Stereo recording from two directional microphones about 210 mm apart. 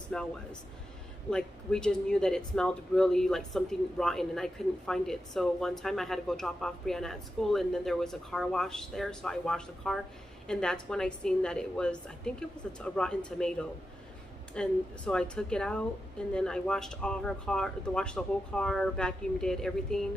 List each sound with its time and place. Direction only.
0.1 s speech: 5° left (ahead or behind)
1.3 s speech: 5° left (ahead or behind)